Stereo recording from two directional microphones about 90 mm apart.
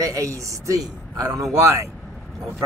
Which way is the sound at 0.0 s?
40° right (ahead or behind).